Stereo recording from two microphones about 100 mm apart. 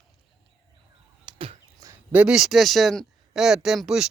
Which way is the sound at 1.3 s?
50° right (ahead or behind).